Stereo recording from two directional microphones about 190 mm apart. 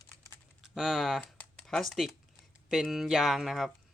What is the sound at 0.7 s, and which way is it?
Speech, centre (ahead or behind).